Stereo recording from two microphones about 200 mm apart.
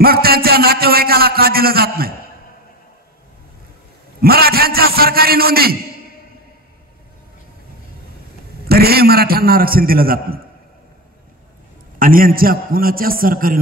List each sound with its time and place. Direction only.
0.0 s a man's voice: 50° right (ahead or behind)
4.2 s a man's voice: 50° right (ahead or behind)
8.6 s a man's voice: 50° right (ahead or behind)
12.0 s a man's voice: 45° right (ahead or behind)